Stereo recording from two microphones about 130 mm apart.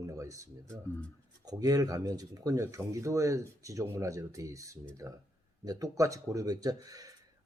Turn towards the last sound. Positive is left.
turn(degrees=-25)  # may be behind; listen again after turning